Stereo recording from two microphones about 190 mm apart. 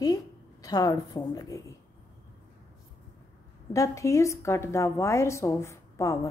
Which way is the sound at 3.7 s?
15° left (ahead or behind).